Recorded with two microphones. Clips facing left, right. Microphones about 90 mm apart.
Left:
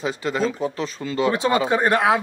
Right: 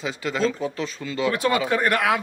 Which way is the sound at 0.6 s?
35° left (ahead or behind).